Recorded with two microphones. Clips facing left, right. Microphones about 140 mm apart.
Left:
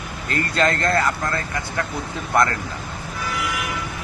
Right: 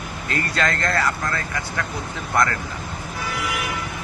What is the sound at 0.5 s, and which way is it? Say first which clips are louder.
Speech: left 4 dB; 25° left (ahead or behind).